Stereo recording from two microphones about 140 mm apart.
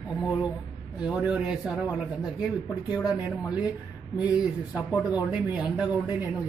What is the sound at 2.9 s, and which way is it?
Speech, 25° left (ahead or behind).